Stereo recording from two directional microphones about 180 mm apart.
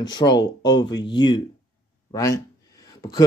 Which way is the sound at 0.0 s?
25° left (ahead or behind).